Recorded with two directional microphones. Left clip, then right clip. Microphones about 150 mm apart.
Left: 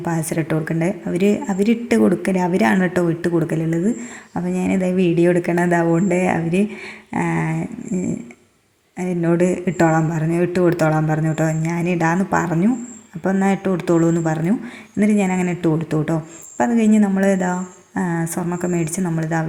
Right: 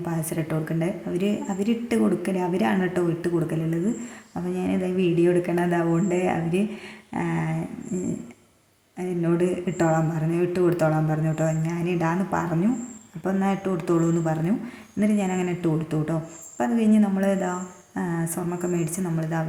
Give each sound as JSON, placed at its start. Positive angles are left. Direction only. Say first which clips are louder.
{"t": 0.0, "sound": "a woman's voice", "louder": "left 7 dB", "side_deg": 30}